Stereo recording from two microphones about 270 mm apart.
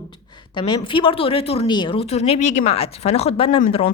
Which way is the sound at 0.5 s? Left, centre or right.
Centre.